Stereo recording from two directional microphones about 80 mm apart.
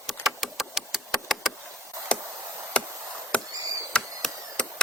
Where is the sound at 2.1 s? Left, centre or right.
Centre.